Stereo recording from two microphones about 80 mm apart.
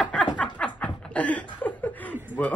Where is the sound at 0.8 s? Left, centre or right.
Centre.